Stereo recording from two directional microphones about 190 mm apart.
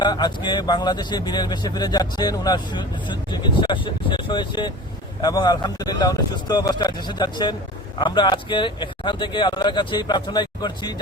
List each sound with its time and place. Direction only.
0.0 s speech: 20° left (ahead or behind)